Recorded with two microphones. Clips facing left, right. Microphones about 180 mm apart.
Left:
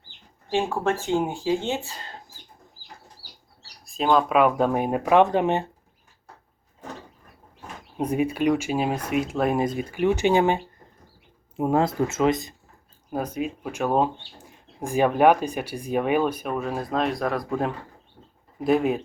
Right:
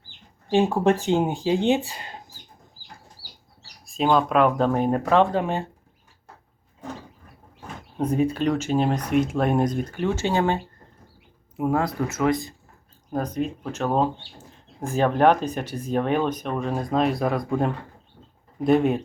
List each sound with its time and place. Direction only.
0.5 s speech: 15° right (ahead or behind)
3.8 s speech: centre (ahead or behind); by 5.6 s 20° left (ahead or behind)
7.9 s speech: 10° left (ahead or behind)
11.5 s speech: 25° left (ahead or behind)
13.1 s speech: 10° left (ahead or behind)